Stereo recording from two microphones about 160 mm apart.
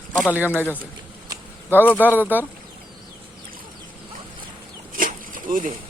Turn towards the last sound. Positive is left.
turn(degrees=-55)  # may be behind; listen again after turning